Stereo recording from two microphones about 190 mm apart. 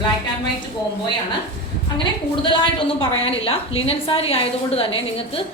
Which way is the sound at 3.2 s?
30° left (ahead or behind).